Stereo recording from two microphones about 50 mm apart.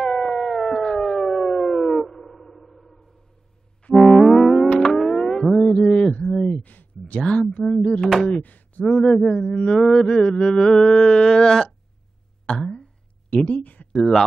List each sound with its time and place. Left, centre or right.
0.0 s siren: centre
3.9 s music: centre
4.9 s a sound: centre
6.6 s a sound: left
7.2 s speech: centre
7.6 s speech: centre
7.9 s speech: centre
8.4 s a sound: left
8.8 s speech: centre
12.6 s a sound: left
13.5 s speech: left
13.9 s speech: centre